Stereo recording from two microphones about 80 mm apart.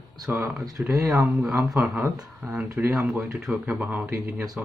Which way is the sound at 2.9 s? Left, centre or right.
Centre.